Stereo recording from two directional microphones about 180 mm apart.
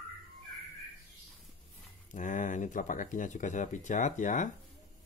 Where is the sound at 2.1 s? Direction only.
45° left (ahead or behind).